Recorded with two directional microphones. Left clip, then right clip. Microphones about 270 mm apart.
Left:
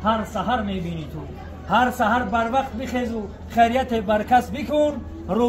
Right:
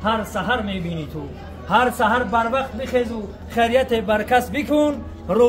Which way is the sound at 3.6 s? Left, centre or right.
Centre.